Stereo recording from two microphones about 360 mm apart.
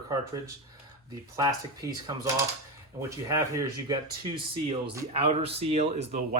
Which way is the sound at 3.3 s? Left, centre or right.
Centre.